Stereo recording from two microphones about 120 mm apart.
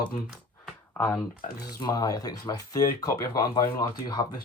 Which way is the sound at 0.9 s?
15° left (ahead or behind).